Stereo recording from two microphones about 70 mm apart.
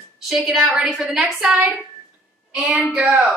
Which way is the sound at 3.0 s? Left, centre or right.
Centre.